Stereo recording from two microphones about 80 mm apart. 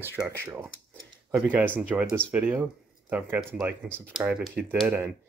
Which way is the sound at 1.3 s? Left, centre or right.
Right.